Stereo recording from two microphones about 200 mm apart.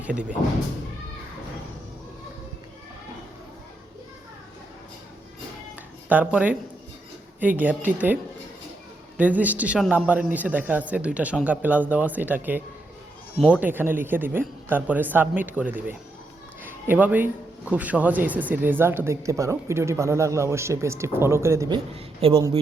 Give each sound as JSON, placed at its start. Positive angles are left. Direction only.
{"t": 0.0, "sound": "speech", "side_deg": -5}
{"t": 6.1, "sound": "a man's voice", "side_deg": -10}
{"t": 21.9, "sound": "a man's voice", "side_deg": -25}